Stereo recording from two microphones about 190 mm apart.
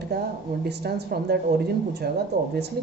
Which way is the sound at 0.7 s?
60° right (ahead or behind).